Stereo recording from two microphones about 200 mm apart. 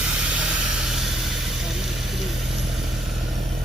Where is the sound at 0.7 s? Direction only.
Centre (ahead or behind).